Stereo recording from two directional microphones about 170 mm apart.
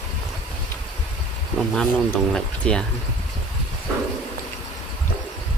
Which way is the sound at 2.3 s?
5° left (ahead or behind).